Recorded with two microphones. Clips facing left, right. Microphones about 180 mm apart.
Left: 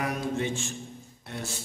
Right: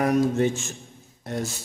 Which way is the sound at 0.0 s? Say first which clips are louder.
Right 9 dB; 45° right (ahead or behind).